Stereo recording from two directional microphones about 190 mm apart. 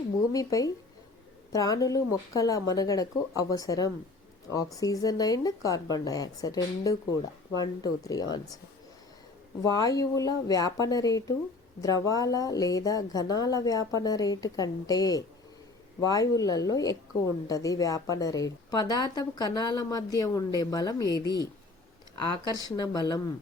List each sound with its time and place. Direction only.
0.3 s a woman's voice: 20° left (ahead or behind)
9.6 s a woman's voice: 20° left (ahead or behind)
22.7 s a woman's voice: 20° left (ahead or behind)